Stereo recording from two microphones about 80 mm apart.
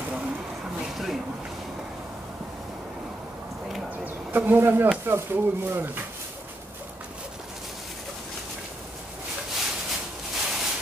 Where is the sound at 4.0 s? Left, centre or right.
Right.